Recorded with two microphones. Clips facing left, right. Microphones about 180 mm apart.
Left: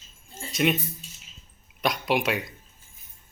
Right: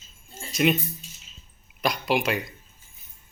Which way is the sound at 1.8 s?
Centre (ahead or behind).